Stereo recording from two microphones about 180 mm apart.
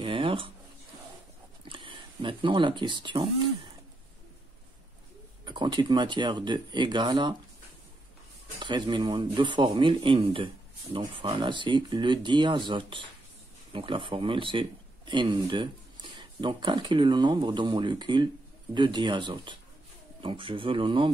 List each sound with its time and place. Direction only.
0.0 s a sound: 30° right (ahead or behind)
1.6 s speech: 30° right (ahead or behind)
5.4 s speech: 25° right (ahead or behind)
8.5 s speech: 25° right (ahead or behind)